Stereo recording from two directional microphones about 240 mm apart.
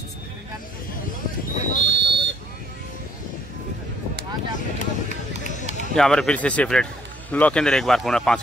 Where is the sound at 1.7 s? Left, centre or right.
Right.